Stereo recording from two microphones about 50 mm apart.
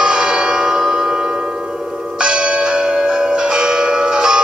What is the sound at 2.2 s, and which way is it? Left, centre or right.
Church bell, centre.